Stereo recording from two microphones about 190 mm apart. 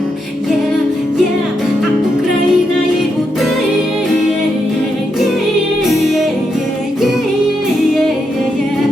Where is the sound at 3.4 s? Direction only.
Centre (ahead or behind).